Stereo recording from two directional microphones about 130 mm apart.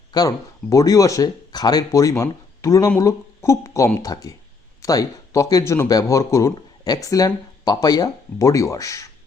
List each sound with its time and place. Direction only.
0.1 s speech: 30° left (ahead or behind)